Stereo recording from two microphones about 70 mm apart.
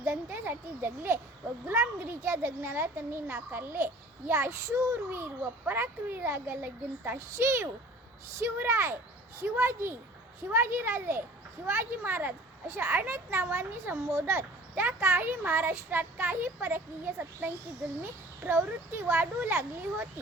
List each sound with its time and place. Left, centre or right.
0.0 s a child's voice: right